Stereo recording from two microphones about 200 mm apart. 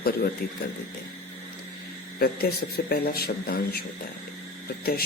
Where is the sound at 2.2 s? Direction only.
50° left (ahead or behind).